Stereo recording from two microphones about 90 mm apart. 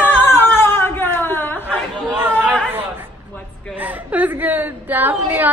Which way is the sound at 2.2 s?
20° right (ahead or behind).